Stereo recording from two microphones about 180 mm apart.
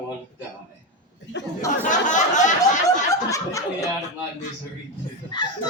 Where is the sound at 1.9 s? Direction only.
45° left (ahead or behind).